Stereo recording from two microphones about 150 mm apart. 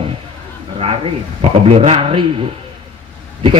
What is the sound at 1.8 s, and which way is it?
Speech, 40° right (ahead or behind).